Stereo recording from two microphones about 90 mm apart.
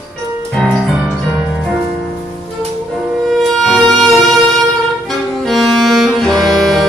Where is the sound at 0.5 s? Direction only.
5° left (ahead or behind).